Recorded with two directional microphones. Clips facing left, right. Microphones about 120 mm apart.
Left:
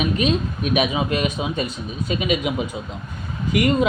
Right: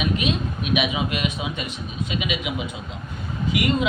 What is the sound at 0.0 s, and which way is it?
Speech, 40° left (ahead or behind).